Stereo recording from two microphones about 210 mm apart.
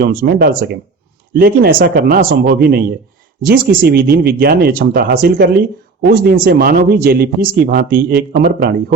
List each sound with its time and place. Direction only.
0.0 s speech: 45° right (ahead or behind)